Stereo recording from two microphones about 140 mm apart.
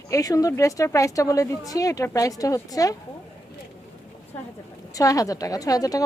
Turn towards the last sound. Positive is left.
turn(degrees=25)  # may be behind; listen again after turning